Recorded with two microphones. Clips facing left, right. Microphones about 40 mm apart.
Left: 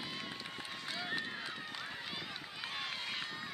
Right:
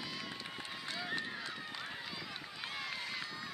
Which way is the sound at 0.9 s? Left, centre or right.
Centre.